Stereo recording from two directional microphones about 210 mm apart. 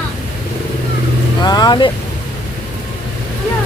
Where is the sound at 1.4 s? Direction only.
20° left (ahead or behind).